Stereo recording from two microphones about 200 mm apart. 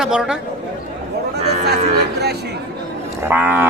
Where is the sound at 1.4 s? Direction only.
35° right (ahead or behind).